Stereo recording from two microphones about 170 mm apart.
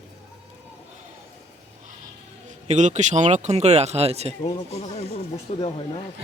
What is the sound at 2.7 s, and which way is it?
Speech, 45° right (ahead or behind).